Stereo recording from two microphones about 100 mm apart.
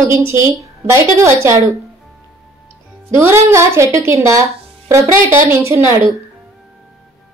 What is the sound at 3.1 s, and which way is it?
A woman's voice, 25° right (ahead or behind).